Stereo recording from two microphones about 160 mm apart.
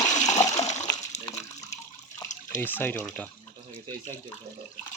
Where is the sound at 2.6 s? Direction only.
10° left (ahead or behind).